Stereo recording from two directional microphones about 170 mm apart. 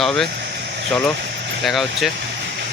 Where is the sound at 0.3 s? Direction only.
85° right.